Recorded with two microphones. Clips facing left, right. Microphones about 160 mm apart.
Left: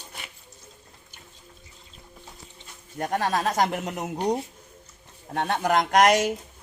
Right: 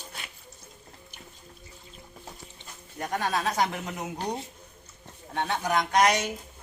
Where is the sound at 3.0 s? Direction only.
45° left (ahead or behind).